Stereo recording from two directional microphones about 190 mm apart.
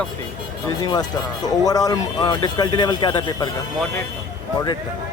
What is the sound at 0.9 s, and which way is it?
Speech, 20° left (ahead or behind).